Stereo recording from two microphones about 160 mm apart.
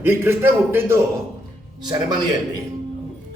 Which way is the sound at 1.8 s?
25° right (ahead or behind).